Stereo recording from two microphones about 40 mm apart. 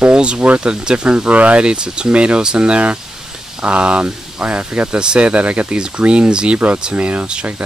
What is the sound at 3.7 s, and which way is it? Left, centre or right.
Speech, right.